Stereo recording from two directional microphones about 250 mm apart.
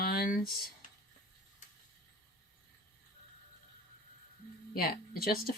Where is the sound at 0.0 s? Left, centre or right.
Left.